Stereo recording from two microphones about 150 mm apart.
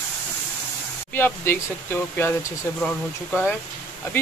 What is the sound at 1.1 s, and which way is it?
Speech, 15° left (ahead or behind).